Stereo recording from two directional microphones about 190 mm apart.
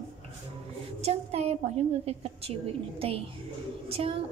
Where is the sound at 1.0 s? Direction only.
35° right (ahead or behind).